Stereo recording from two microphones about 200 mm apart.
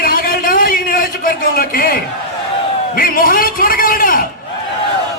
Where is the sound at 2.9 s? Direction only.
45° left (ahead or behind).